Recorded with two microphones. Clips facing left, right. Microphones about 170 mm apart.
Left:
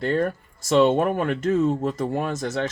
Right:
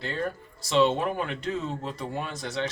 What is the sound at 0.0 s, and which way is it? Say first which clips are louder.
Speech: left 8 dB; 50° left (ahead or behind).